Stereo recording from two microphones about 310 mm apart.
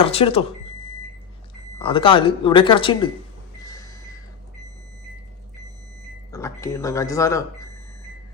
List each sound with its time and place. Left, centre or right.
0.0 s speech: centre
1.8 s speech: centre
3.6 s a sound: centre
6.3 s speech: centre